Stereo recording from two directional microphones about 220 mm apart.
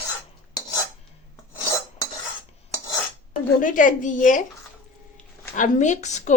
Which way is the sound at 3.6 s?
35° left (ahead or behind).